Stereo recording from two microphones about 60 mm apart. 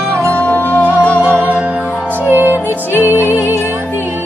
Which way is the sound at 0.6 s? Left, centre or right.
Left.